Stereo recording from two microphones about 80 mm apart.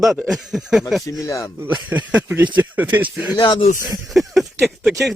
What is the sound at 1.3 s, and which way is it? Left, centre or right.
Speech, left.